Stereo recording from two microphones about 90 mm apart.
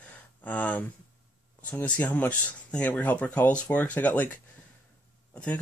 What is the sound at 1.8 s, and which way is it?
Speech, 15° left (ahead or behind).